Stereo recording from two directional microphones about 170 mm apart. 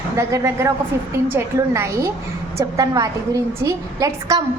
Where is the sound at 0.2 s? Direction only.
15° right (ahead or behind).